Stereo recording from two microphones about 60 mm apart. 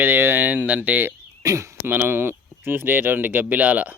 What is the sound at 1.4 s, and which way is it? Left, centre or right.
Speech, right.